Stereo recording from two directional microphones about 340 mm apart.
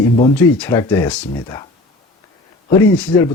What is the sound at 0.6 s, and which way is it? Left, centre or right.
Speech, centre.